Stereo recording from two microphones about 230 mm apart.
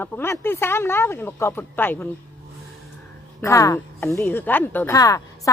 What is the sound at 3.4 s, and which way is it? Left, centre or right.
Speech, centre.